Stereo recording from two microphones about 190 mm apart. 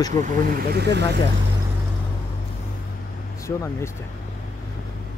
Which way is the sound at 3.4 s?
15° left (ahead or behind).